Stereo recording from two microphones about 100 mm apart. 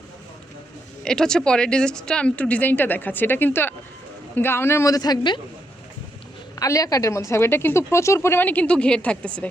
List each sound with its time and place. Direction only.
1.0 s a woman's voice: 5° left (ahead or behind); by 5.4 s 45° left (ahead or behind)
6.6 s a woman's voice: 35° left (ahead or behind); by 9.5 s 10° left (ahead or behind)